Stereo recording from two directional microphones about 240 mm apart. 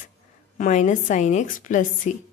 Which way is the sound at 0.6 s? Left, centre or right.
Left.